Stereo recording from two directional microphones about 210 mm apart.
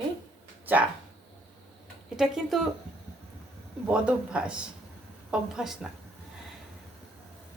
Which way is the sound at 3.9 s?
5° right (ahead or behind).